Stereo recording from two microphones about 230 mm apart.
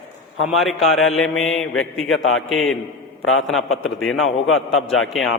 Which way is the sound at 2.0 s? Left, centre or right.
Left.